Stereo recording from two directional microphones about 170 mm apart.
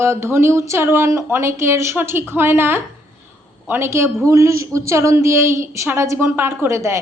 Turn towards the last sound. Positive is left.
turn(degrees=-15)  # may be behind; listen again after turning